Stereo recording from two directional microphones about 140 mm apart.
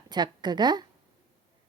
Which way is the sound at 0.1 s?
30° right (ahead or behind).